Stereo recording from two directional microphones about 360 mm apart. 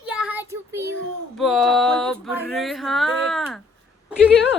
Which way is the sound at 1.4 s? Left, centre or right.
Centre.